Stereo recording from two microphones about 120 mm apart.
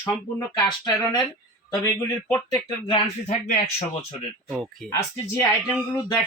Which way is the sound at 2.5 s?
40° left (ahead or behind).